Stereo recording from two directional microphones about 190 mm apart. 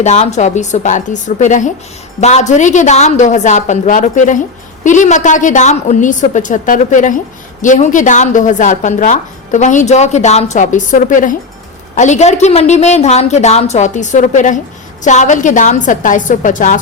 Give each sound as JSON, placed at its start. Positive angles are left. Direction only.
{"t": 0.0, "sound": "a woman's voice", "side_deg": 35}